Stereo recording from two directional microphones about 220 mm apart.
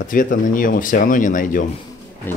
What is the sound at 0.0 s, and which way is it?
Speech, 35° left (ahead or behind).